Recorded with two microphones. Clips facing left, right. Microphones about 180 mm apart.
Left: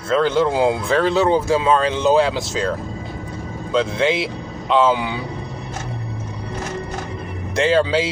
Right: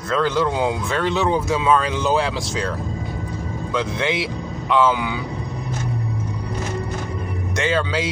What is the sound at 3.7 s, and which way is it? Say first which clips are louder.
Speech: left 5 dB; 25° left (ahead or behind).